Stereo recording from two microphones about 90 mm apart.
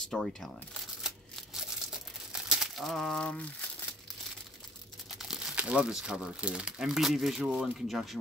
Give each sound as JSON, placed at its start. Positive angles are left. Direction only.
{"t": 0.1, "sound": "speech", "side_deg": 5}
{"t": 1.0, "sound": "a sound", "side_deg": -5}
{"t": 2.4, "sound": "speech", "side_deg": 0}
{"t": 5.2, "sound": "speech", "side_deg": -10}